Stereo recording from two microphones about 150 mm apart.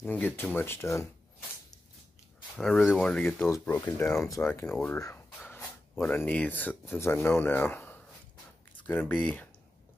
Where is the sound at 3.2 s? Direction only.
15° left (ahead or behind).